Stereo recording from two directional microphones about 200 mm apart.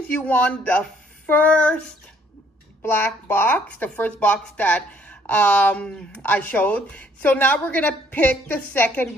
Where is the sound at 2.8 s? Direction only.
10° left (ahead or behind).